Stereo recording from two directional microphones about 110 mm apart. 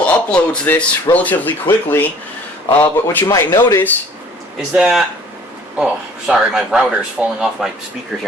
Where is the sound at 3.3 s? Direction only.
30° left (ahead or behind).